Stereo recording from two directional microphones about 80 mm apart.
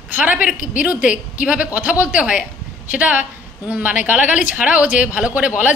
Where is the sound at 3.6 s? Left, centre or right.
Right.